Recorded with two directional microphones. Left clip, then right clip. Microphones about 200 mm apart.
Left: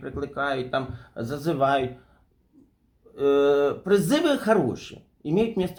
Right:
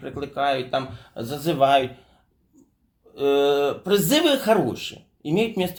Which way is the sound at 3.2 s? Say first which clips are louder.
Right 1 dB; 5° right (ahead or behind).